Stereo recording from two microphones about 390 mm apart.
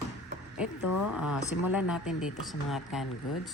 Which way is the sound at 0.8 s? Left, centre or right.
Left.